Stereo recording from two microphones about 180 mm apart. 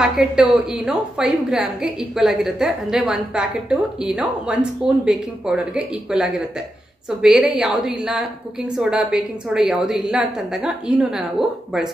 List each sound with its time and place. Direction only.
0.0 s a woman's voice: 5° right (ahead or behind)